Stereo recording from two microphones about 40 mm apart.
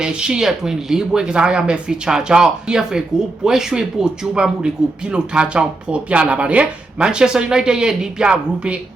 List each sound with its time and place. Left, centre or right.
0.0 s speech: right
7.1 s speech: centre